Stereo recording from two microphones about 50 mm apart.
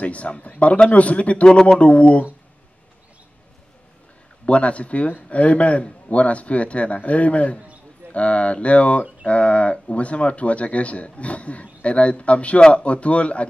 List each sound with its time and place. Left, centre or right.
0.0 s speech: left
4.5 s speech: left